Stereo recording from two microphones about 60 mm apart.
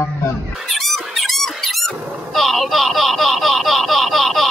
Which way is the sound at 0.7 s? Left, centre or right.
Centre.